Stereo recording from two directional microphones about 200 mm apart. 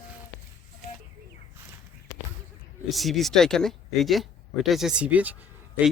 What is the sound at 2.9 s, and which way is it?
Speech, centre (ahead or behind).